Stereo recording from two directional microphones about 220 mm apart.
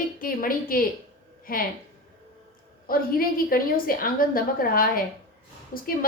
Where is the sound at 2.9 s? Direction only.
40° left (ahead or behind).